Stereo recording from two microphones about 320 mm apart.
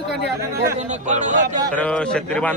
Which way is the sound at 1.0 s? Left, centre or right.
Right.